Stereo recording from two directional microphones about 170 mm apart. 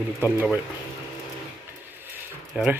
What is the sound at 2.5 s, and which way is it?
Speech, 5° right (ahead or behind).